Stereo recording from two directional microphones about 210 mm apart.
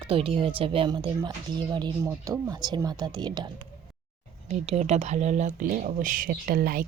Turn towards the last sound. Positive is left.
turn(degrees=-45)  # may be behind; listen again after turning